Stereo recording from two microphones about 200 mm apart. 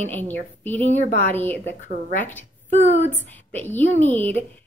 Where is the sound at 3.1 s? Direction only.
10° left (ahead or behind).